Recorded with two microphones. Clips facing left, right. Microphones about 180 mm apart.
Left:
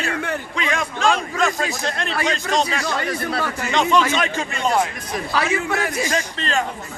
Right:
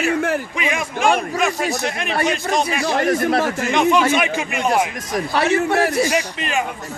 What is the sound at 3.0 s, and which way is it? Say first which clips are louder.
Speech: right 7 dB; 50° right (ahead or behind).